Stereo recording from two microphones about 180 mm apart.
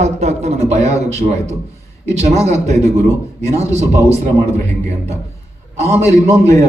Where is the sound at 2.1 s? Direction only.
35° right (ahead or behind).